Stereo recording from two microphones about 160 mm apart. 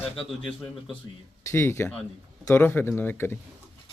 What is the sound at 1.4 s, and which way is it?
Speech, 15° left (ahead or behind).